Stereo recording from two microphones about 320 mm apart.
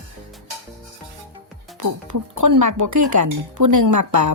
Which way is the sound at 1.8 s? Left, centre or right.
Right.